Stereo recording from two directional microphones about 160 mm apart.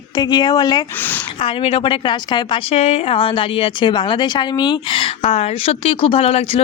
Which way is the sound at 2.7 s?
40° left (ahead or behind).